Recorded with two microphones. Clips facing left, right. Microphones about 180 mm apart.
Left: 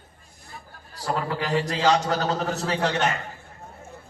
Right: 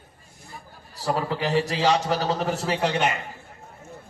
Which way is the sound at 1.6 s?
10° right (ahead or behind).